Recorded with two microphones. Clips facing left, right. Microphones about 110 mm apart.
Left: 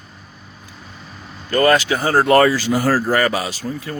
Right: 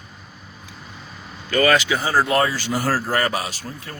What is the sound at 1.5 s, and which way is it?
Speech, 50° left (ahead or behind).